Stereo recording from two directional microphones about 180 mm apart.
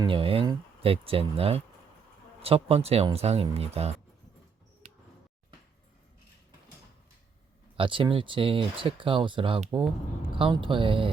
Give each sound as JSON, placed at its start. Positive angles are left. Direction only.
{"t": 0.0, "sound": "speech", "side_deg": -30}
{"t": 7.8, "sound": "speech", "side_deg": -30}